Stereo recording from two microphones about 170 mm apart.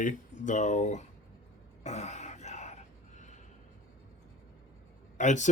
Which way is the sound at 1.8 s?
45° left (ahead or behind).